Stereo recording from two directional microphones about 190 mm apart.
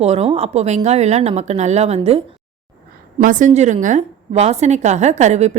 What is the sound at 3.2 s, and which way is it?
Speech, 40° right (ahead or behind).